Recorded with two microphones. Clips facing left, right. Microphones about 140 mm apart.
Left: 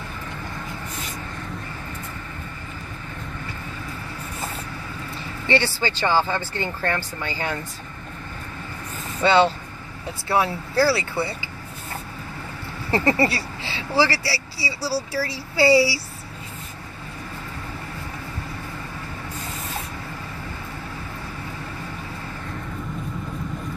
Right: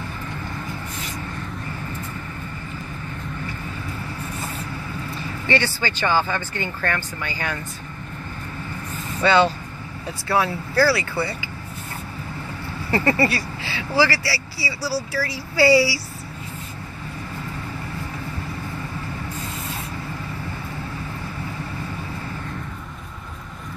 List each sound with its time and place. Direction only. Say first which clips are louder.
5.5 s speech: left 1 dB; 25° left (ahead or behind)
9.2 s speech: even; 25° left (ahead or behind)
12.9 s speech: even; 20° left (ahead or behind)